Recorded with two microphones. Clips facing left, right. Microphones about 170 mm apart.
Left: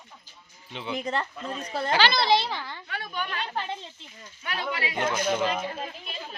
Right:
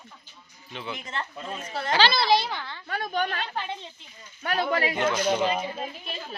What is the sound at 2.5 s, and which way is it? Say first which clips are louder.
Speech: even; 5° left (ahead or behind).